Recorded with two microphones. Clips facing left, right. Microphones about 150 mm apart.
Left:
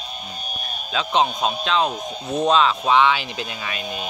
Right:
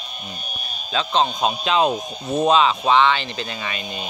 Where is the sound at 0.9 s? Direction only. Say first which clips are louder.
Even; 5° left (ahead or behind).